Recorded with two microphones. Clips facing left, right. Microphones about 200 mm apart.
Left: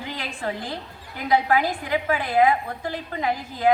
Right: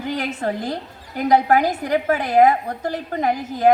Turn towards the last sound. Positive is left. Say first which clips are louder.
# right 5 dB
turn(degrees=-45)  # may be behind; listen again after turning